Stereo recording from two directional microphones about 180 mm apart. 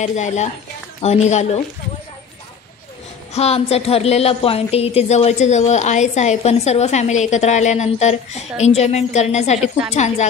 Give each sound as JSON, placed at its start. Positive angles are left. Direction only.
{"t": 0.0, "sound": "a woman's voice", "side_deg": 40}
{"t": 3.3, "sound": "a woman's voice", "side_deg": 35}